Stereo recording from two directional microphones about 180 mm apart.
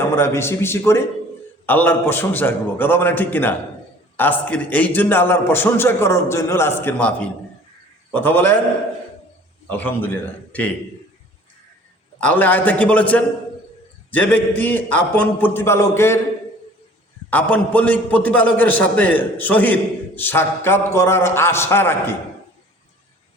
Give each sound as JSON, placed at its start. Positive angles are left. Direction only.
{"t": 0.2, "sound": "a man's voice", "side_deg": 15}
{"t": 9.6, "sound": "a man's voice", "side_deg": 10}
{"t": 12.2, "sound": "a man's voice", "side_deg": 10}
{"t": 17.2, "sound": "a man's voice", "side_deg": 5}